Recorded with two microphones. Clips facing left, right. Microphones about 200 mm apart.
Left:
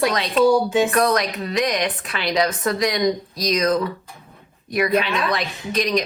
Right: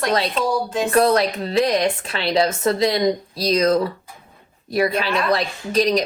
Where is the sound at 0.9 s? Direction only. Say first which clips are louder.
Right 3 dB; 30° right (ahead or behind).